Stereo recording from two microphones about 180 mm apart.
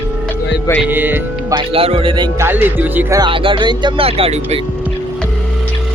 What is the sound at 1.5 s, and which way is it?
Speech, 30° right (ahead or behind).